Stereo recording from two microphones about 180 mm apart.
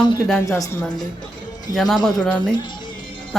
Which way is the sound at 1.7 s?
Centre (ahead or behind).